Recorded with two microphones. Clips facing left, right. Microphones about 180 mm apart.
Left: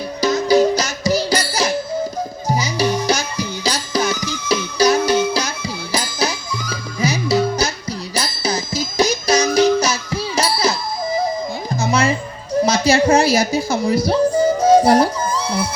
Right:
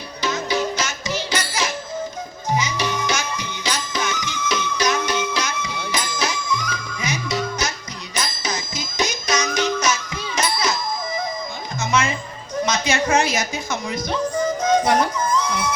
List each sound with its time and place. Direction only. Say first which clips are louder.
0.2 s music: left 9 dB; 35° left (ahead or behind)